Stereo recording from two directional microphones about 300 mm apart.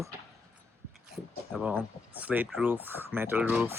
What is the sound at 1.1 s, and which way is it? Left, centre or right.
Speech, centre.